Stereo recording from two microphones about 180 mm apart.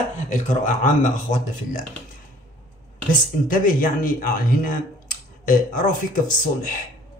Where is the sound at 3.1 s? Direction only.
50° left (ahead or behind).